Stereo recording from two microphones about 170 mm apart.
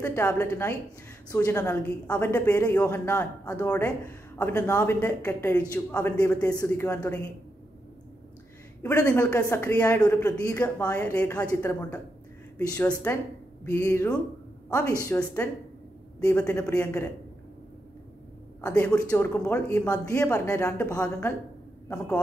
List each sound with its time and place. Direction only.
0.0 s a man's voice: 15° left (ahead or behind)
8.8 s speech: 15° left (ahead or behind)
12.5 s a woman's voice: 20° left (ahead or behind)
12.8 s a woman's voice: 10° left (ahead or behind)
18.7 s a man's voice: 10° left (ahead or behind)